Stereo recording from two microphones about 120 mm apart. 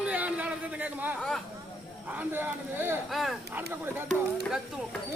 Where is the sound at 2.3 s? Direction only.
20° right (ahead or behind).